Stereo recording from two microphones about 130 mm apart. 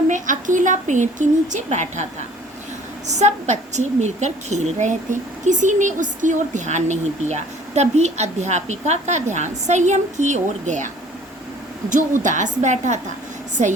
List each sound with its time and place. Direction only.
0.1 s a woman's voice: 75° right (ahead or behind)
3.1 s a woman's voice: 65° right (ahead or behind)
11.9 s a woman's voice: 80° right